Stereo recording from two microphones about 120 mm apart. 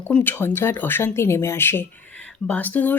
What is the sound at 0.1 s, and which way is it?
Speech, 15° left (ahead or behind).